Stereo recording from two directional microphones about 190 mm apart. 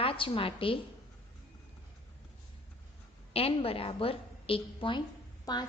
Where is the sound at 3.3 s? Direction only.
30° left (ahead or behind).